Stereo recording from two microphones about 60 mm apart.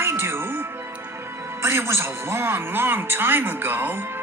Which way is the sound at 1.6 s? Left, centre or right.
Right.